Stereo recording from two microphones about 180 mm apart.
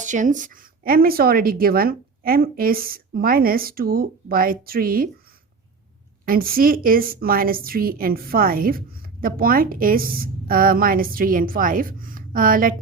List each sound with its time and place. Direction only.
0.0 s a woman's voice: 45° right (ahead or behind)
6.2 s a woman's voice: 55° right (ahead or behind)